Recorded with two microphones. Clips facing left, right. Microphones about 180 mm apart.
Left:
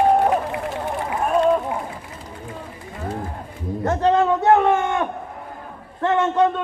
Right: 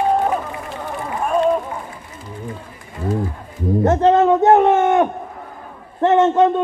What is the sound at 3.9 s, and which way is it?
A man's voice, 20° right (ahead or behind).